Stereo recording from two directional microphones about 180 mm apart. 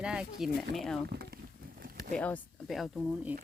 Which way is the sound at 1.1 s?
60° right (ahead or behind).